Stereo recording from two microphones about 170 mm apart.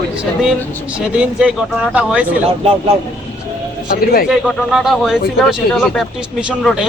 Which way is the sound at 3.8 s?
60° left (ahead or behind).